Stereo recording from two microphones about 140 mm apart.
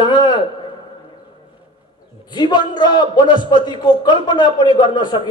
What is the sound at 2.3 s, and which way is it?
A man's voice, 30° left (ahead or behind).